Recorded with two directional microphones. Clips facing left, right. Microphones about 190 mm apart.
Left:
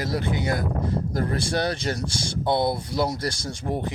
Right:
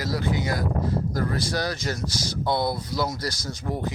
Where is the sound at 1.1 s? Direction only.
25° left (ahead or behind).